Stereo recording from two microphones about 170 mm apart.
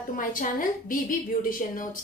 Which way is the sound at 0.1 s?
55° left (ahead or behind).